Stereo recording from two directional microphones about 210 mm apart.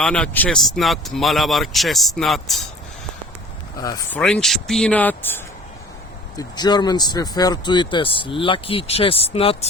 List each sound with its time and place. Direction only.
0.0 s speech: 5° left (ahead or behind)
3.8 s speech: 15° left (ahead or behind)
4.2 s speech: 5° left (ahead or behind)
6.3 s speech: 20° left (ahead or behind)